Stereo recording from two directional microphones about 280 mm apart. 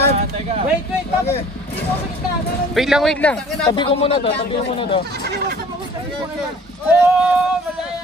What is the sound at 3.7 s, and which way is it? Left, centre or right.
Speech, centre.